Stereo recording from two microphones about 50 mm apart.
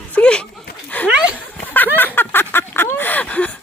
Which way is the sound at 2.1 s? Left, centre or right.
Left.